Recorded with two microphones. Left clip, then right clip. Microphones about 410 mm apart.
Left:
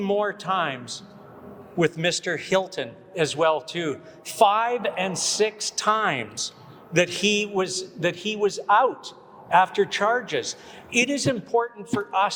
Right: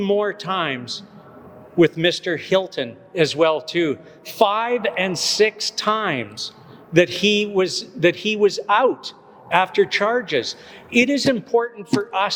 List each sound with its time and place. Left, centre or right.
0.0 s a man's voice: right